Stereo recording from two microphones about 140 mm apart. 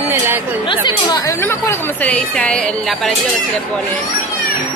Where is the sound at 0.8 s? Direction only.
30° left (ahead or behind).